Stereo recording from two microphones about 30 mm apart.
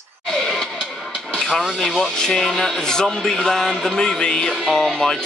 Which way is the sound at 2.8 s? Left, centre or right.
Left.